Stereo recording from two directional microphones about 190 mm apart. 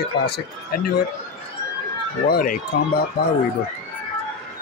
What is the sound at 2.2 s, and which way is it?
Speech, 50° left (ahead or behind).